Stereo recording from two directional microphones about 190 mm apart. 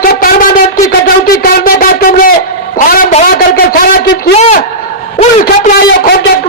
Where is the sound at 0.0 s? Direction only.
50° left (ahead or behind).